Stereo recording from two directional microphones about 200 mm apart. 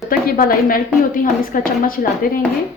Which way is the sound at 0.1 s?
45° left (ahead or behind).